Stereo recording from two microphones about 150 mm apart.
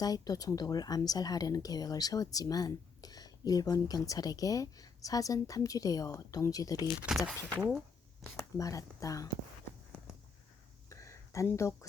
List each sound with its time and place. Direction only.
0.0 s speech: 25° left (ahead or behind)
6.8 s speech: centre (ahead or behind)
8.5 s speech: 20° left (ahead or behind)
10.8 s a sound: 20° left (ahead or behind)